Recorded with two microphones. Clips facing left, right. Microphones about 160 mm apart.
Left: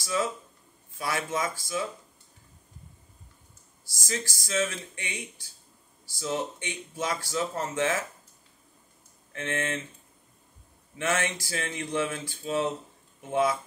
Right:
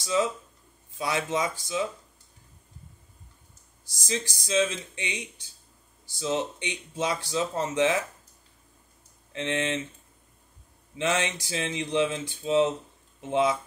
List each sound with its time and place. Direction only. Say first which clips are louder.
0.0 s speech: right 3 dB; 20° right (ahead or behind)
3.8 s speech: right 2 dB; 20° right (ahead or behind)
9.3 s speech: right 3 dB; 20° right (ahead or behind)
11.0 s speech: right 2 dB; 20° right (ahead or behind)